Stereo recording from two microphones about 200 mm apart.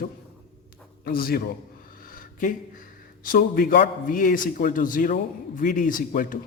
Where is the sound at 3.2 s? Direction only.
45° left (ahead or behind).